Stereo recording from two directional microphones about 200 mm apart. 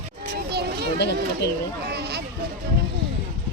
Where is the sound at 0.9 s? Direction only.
55° left (ahead or behind).